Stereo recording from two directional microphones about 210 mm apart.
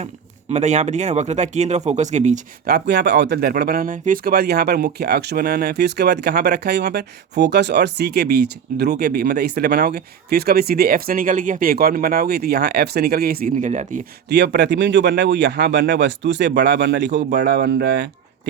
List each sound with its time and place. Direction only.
0.5 s speech: 35° right (ahead or behind)
2.6 s speech: 50° right (ahead or behind)
14.3 s speech: 50° right (ahead or behind)